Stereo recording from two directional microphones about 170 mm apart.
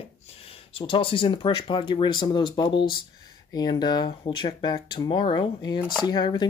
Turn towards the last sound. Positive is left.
turn(degrees=25)  # may be behind; listen again after turning